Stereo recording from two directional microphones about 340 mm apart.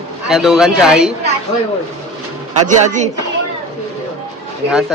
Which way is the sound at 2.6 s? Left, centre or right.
Right.